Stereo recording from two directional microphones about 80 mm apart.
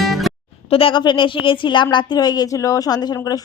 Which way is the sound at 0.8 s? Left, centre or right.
Left.